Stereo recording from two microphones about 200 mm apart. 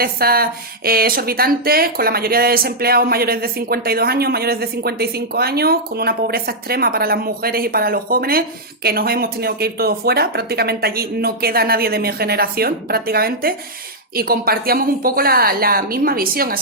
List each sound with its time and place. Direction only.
0.0 s speech: 50° right (ahead or behind)